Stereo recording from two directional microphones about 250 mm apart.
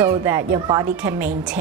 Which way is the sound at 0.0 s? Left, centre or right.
Centre.